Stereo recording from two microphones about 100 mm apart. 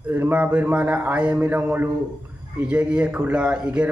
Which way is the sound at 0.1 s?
15° right (ahead or behind).